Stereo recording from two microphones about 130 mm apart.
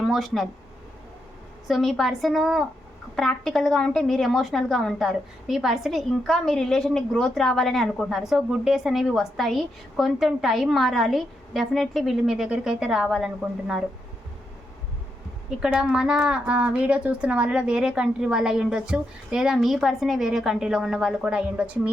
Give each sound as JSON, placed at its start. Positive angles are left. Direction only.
{"t": 0.0, "sound": "speech", "side_deg": 0}
{"t": 1.6, "sound": "a woman's voice", "side_deg": 0}
{"t": 15.4, "sound": "a woman's voice", "side_deg": -5}